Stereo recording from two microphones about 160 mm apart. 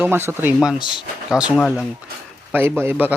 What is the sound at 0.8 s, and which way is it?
Speech, 30° left (ahead or behind).